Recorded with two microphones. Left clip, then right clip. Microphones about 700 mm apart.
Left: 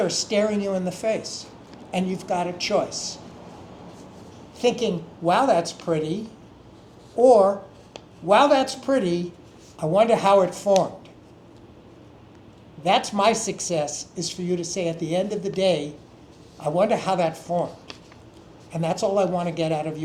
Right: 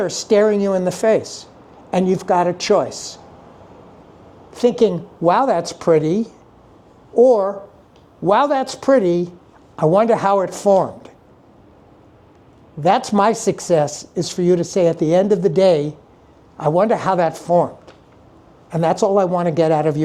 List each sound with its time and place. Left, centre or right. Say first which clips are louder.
0.0 s speech: right 7 dB; right
4.6 s speech: right 7 dB; right
7.2 s speech: right 2 dB; right
12.8 s speech: right 5 dB; right
18.7 s speech: right 8 dB; right